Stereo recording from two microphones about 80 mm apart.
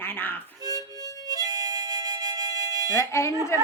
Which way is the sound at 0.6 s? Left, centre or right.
Right.